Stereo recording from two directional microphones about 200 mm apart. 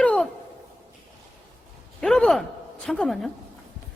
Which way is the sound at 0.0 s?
5° left (ahead or behind).